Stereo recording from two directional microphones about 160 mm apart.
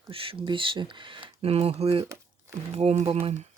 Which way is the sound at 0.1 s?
35° right (ahead or behind).